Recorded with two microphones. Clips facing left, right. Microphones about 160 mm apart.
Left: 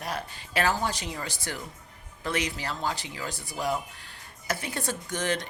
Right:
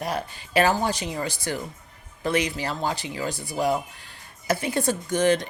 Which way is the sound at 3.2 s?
25° right (ahead or behind).